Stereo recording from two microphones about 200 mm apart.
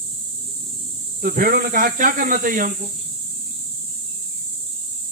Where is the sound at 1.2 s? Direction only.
45° right (ahead or behind).